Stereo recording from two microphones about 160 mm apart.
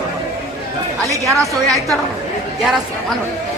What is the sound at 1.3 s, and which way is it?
A woman's voice, centre (ahead or behind).